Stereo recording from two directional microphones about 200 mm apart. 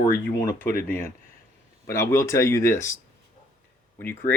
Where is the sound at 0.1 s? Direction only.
15° left (ahead or behind).